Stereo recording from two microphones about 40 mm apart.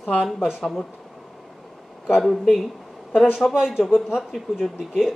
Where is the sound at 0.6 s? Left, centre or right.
Centre.